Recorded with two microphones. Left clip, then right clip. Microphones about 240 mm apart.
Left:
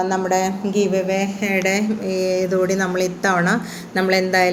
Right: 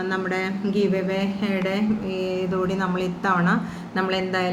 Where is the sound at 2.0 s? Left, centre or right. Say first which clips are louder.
Left 7 dB; left.